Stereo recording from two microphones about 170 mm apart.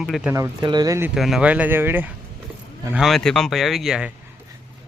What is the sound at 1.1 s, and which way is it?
Speech, centre (ahead or behind).